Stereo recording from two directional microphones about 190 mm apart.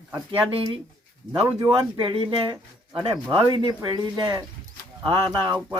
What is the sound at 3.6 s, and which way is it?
Speech, 20° right (ahead or behind).